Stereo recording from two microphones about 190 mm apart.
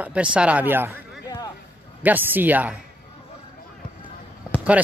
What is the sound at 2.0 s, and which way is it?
Speech, 10° right (ahead or behind).